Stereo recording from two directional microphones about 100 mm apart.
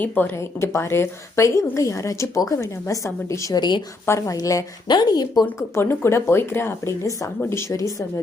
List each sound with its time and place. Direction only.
0.0 s speech: 20° left (ahead or behind)
3.5 s speech: 45° left (ahead or behind)
4.0 s speech: 30° left (ahead or behind)
4.9 s speech: 45° left (ahead or behind)
5.7 s speech: 25° left (ahead or behind)